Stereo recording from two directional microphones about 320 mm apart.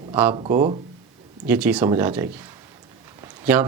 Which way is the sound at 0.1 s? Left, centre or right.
Centre.